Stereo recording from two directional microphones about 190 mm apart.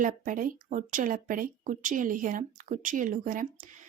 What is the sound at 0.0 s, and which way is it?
Speech, 45° right (ahead or behind).